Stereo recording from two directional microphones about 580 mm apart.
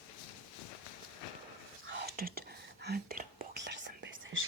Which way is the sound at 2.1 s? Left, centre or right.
Centre.